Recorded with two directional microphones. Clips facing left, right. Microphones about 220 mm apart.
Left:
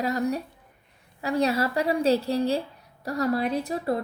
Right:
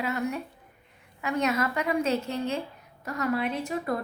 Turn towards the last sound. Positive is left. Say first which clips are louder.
# left 3 dB
turn(degrees=35)  # may be behind; listen again after turning